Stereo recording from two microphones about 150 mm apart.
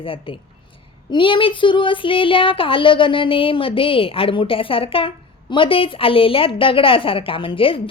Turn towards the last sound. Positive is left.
turn(degrees=35)  # may be behind; listen again after turning